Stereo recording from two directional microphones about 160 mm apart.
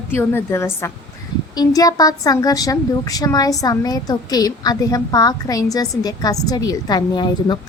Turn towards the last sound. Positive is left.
turn(degrees=25)  # may be behind; listen again after turning